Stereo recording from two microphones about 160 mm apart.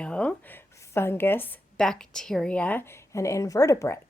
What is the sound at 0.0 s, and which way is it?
A woman's voice, 5° left (ahead or behind).